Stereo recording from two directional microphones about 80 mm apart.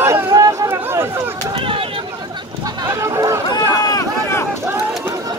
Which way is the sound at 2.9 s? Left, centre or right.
Right.